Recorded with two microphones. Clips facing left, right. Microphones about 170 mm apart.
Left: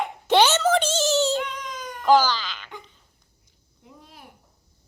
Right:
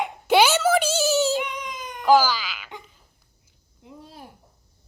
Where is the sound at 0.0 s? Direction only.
10° right (ahead or behind).